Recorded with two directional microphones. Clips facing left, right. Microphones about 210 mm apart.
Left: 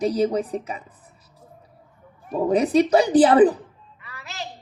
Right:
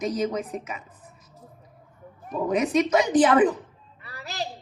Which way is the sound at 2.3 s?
35° left (ahead or behind).